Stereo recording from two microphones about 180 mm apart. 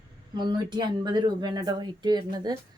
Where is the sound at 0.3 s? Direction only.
25° right (ahead or behind).